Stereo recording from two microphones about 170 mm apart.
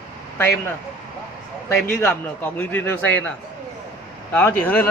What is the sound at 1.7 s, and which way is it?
Speech, 10° left (ahead or behind).